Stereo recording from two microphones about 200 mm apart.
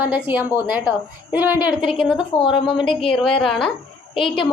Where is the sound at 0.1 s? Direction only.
10° right (ahead or behind).